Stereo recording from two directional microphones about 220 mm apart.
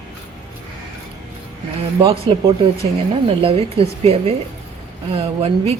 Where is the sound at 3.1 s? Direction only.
25° right (ahead or behind).